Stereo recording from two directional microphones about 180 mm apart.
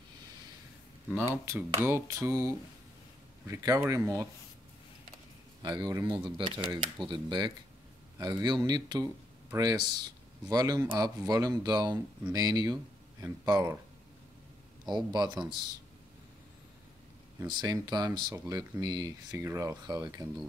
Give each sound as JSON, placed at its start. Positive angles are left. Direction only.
{"t": 1.3, "sound": "speech", "side_deg": -15}
{"t": 5.6, "sound": "speech", "side_deg": -25}
{"t": 15.1, "sound": "speech", "side_deg": -25}
{"t": 17.5, "sound": "speech", "side_deg": -25}